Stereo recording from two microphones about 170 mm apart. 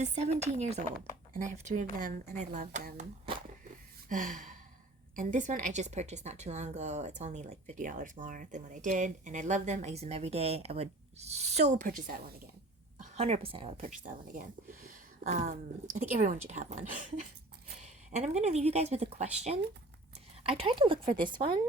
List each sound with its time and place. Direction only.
0.0 s a woman's voice: 40° right (ahead or behind)
4.1 s gasp: 50° right (ahead or behind)
5.1 s a woman's voice: 50° right (ahead or behind)
13.1 s a woman's voice: 40° right (ahead or behind)
13.8 s a woman's voice: 50° right (ahead or behind); by 21.6 s 30° right (ahead or behind)